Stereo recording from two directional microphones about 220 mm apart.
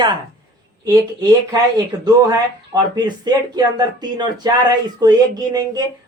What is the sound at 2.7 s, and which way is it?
Speech, 20° right (ahead or behind).